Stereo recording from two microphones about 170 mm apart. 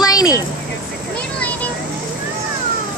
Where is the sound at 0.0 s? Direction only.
20° left (ahead or behind).